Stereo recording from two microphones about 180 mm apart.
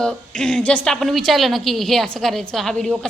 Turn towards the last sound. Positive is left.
turn(degrees=5)  # may be behind; listen again after turning